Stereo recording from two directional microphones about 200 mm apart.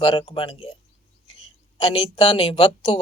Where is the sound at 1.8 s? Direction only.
30° left (ahead or behind).